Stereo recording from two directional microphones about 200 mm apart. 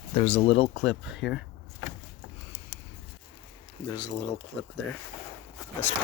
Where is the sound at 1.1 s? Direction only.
60° left (ahead or behind).